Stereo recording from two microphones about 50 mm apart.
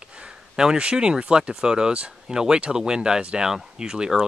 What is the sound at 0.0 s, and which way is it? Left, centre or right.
Speech, right.